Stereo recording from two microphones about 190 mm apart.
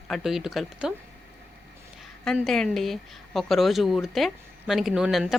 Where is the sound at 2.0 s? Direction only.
Centre (ahead or behind).